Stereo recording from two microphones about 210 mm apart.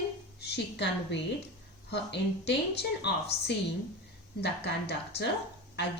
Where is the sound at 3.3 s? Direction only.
30° left (ahead or behind).